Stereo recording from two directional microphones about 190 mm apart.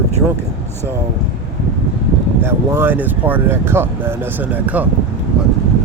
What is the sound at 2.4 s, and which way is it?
Speech, 10° right (ahead or behind).